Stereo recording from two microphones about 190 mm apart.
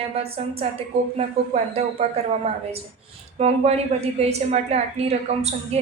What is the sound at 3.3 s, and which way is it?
A woman's voice, 35° right (ahead or behind).